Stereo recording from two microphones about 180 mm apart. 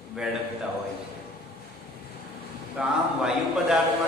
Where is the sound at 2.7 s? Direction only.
Centre (ahead or behind).